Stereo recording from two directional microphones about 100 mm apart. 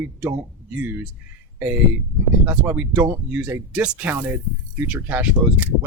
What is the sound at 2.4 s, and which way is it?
Speech, 20° right (ahead or behind).